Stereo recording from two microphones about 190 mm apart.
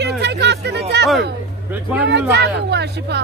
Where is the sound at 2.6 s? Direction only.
60° right (ahead or behind).